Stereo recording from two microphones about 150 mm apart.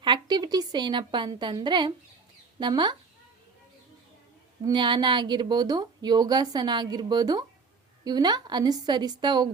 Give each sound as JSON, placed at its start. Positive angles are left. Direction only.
{"t": 0.0, "sound": "a woman's voice", "side_deg": -30}
{"t": 4.6, "sound": "a woman's voice", "side_deg": -30}